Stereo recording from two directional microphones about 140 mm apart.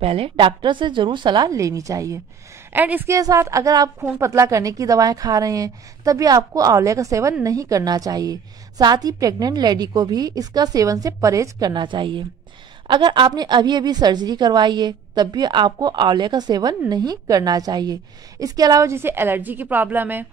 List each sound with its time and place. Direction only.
0.0 s a woman's voice: 45° right (ahead or behind); by 2.1 s 25° right (ahead or behind)
2.7 s a woman's voice: 15° right (ahead or behind)
3.2 s a woman's voice: 25° right (ahead or behind)